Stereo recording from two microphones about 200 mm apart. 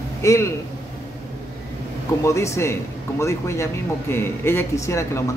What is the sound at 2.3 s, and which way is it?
A man's voice, 15° left (ahead or behind).